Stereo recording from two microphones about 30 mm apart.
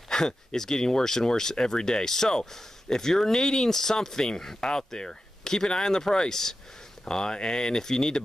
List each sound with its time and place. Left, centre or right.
0.1 s speech: centre